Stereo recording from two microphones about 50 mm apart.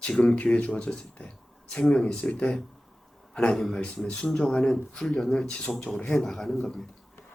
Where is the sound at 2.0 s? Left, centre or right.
Centre.